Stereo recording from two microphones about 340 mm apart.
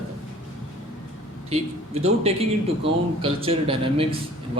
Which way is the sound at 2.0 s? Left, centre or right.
Centre.